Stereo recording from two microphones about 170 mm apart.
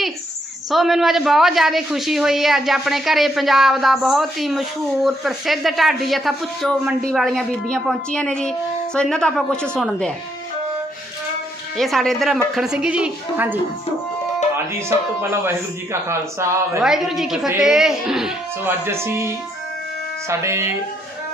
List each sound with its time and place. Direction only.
0.7 s speech: centre (ahead or behind)
11.8 s speech: centre (ahead or behind)
14.7 s speech: 15° right (ahead or behind)
16.8 s speech: centre (ahead or behind)
18.6 s speech: 15° right (ahead or behind)